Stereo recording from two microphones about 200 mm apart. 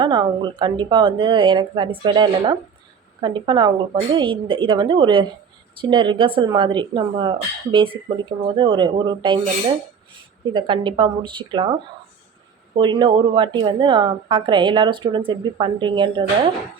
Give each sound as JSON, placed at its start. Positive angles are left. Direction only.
{"t": 0.0, "sound": "a woman's voice", "side_deg": -20}